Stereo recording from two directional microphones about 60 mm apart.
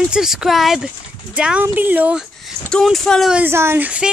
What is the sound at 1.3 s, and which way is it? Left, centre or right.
Speech, centre.